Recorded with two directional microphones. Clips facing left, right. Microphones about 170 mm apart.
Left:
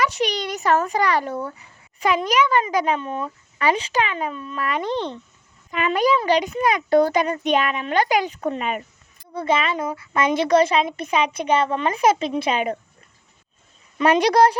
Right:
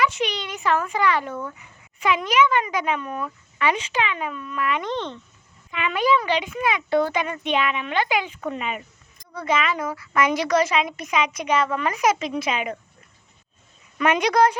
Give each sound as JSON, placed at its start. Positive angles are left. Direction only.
{"t": 0.0, "sound": "a child's voice", "side_deg": 40}
{"t": 9.3, "sound": "a woman's voice", "side_deg": 30}
{"t": 14.0, "sound": "a child's voice", "side_deg": 35}